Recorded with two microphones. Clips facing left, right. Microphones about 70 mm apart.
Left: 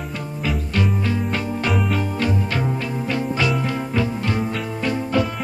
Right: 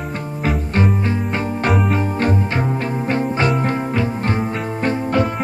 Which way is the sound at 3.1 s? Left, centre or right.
Right.